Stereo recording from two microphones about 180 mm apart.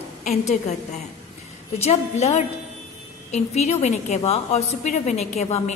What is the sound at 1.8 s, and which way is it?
A woman's voice, 35° left (ahead or behind).